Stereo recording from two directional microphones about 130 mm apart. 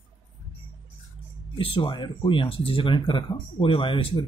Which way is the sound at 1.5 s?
40° left (ahead or behind).